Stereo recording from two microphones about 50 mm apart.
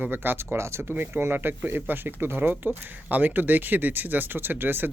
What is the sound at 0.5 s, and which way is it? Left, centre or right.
Speech, right.